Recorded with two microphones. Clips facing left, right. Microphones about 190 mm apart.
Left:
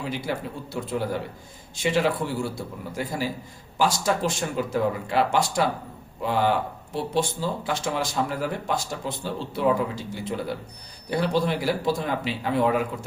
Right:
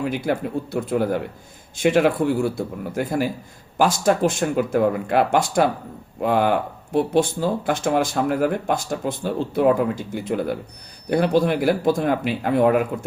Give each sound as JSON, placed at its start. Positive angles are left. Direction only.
{"t": 0.0, "sound": "a man's voice", "side_deg": -55}